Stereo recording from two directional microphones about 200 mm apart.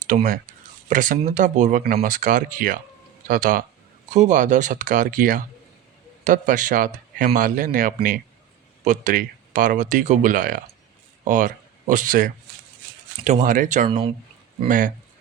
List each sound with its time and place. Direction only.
0.1 s a man's voice: 40° right (ahead or behind)